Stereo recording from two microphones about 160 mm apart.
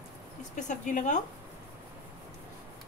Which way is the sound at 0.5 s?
50° left (ahead or behind).